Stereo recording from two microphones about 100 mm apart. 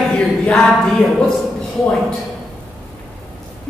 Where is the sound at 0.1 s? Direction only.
10° left (ahead or behind).